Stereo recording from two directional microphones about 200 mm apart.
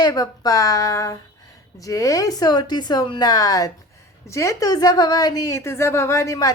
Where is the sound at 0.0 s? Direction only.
20° left (ahead or behind).